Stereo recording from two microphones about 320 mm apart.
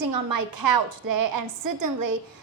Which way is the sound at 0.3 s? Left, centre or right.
Right.